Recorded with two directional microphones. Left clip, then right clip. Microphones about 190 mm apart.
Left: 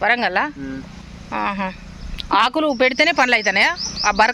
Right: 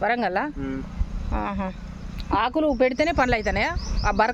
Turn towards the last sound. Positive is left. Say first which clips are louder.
# left 6 dB
turn(degrees=0)  # may be behind; listen again after turning